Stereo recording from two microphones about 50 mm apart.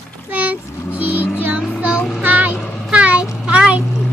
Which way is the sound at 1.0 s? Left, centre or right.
Right.